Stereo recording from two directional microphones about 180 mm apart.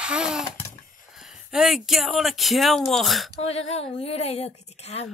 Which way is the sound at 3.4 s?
35° left (ahead or behind).